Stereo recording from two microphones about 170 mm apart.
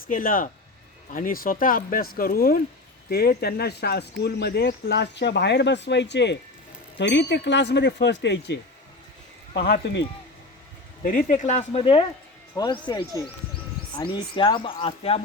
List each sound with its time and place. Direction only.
0.1 s speech: 55° left (ahead or behind); by 8.5 s 90° left
9.6 s speech: 70° left (ahead or behind)
11.0 s speech: 55° left (ahead or behind); by 15.2 s 30° left (ahead or behind)